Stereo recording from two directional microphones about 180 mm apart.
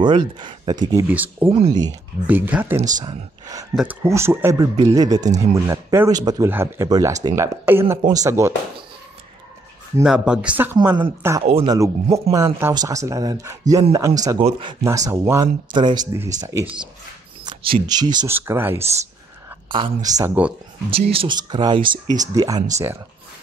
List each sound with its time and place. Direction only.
0.0 s speech: 25° right (ahead or behind)
1.0 s speech: 10° right (ahead or behind)
1.7 s speech: 20° right (ahead or behind)
2.2 s speech: 10° right (ahead or behind)
3.7 s speech: 10° right (ahead or behind)
10.0 s speech: 5° right (ahead or behind)
11.4 s speech: 30° right (ahead or behind)
11.7 s speech: 15° right (ahead or behind)
14.9 s speech: 15° right (ahead or behind)
17.8 s speech: 25° right (ahead or behind)
19.7 s speech: 25° right (ahead or behind)
20.9 s speech: 30° right (ahead or behind)